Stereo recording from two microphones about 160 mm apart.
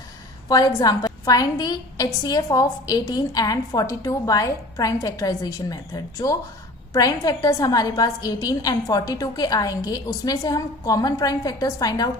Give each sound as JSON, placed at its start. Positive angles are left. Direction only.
{"t": 0.4, "sound": "a woman's voice", "side_deg": 25}